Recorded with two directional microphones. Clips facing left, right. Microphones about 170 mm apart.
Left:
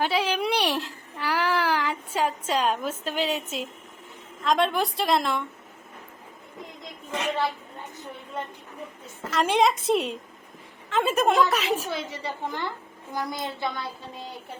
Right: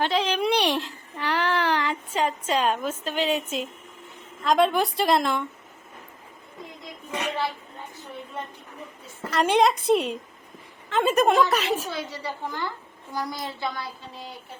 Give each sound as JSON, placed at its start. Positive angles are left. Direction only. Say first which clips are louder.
{"t": 0.0, "sound": "a sound", "louder": "right 1 dB", "side_deg": 5}
{"t": 4.4, "sound": "a woman's voice", "louder": "right 3 dB", "side_deg": 0}
{"t": 9.3, "sound": "a woman's voice", "louder": "right 2 dB", "side_deg": 0}
{"t": 11.9, "sound": "a woman's voice", "louder": "even", "side_deg": 20}